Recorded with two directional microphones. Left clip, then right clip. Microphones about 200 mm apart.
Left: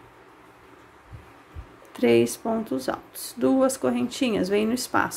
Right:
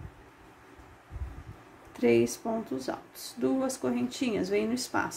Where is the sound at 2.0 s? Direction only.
15° left (ahead or behind).